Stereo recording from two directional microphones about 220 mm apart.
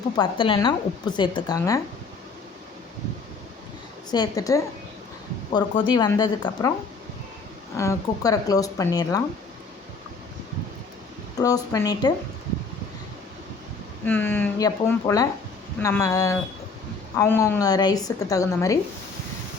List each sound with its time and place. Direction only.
0.2 s a woman's voice: 25° left (ahead or behind)
4.1 s a woman's voice: 15° left (ahead or behind)
7.8 s a woman's voice: 15° left (ahead or behind)
11.3 s a woman's voice: 15° left (ahead or behind)
14.0 s a woman's voice: 10° left (ahead or behind)